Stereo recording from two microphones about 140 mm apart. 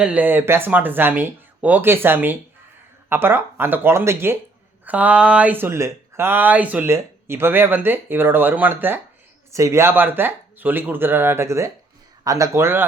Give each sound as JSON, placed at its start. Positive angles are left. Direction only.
{"t": 0.0, "sound": "speech", "side_deg": -10}